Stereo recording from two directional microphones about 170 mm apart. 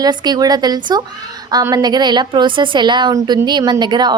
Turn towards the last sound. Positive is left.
turn(degrees=-25)  # may be behind; listen again after turning